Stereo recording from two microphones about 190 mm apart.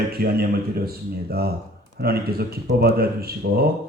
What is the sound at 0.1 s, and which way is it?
Speech, 55° right (ahead or behind).